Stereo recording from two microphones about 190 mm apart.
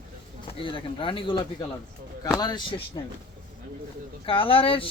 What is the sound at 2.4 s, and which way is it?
Speech, 20° left (ahead or behind).